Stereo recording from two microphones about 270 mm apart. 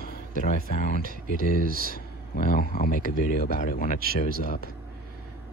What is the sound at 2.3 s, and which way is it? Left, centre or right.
Speech, left.